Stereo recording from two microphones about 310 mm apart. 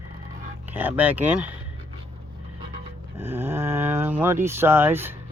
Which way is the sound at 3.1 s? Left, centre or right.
Centre.